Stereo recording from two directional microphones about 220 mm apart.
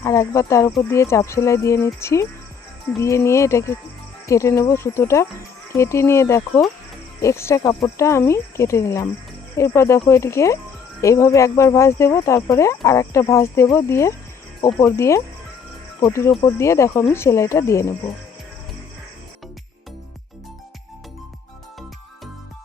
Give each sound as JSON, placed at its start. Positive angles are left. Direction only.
{"t": 0.0, "sound": "speech", "side_deg": 15}